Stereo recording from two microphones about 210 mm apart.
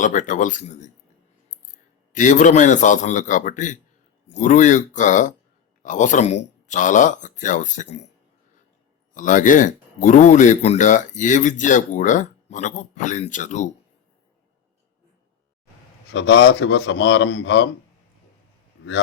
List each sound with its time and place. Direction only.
0.0 s speech: 35° left (ahead or behind)
2.1 s speech: 35° left (ahead or behind)
9.1 s speech: 40° left (ahead or behind)
16.1 s a man's voice: 55° left (ahead or behind)